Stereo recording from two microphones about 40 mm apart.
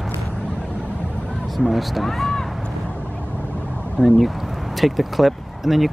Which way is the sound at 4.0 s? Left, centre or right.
Left.